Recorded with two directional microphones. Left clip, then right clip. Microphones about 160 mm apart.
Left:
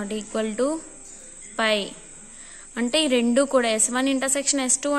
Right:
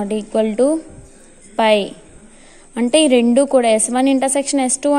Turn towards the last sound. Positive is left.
turn(degrees=-15)  # may be behind; listen again after turning